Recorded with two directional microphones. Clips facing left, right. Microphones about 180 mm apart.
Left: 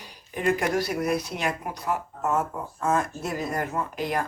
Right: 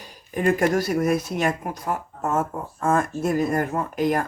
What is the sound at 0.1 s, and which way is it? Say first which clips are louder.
Speech: right 3 dB; 45° right (ahead or behind).